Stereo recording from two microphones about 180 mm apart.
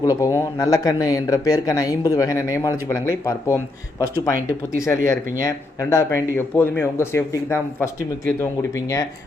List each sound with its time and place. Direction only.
0.0 s speech: 20° left (ahead or behind)
5.0 s speech: 15° left (ahead or behind)